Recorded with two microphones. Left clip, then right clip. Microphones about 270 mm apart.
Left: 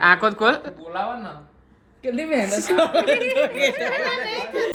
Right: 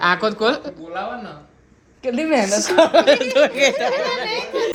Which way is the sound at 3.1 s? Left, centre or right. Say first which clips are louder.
Right 4 dB; centre.